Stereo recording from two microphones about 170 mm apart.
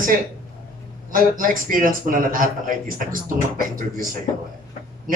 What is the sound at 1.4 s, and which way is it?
A man's voice, 55° right (ahead or behind).